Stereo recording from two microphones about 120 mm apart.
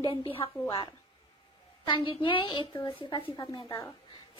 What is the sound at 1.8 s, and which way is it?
A woman's voice, 45° left (ahead or behind).